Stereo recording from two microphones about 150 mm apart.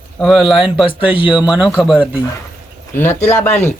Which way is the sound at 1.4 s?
5° right (ahead or behind).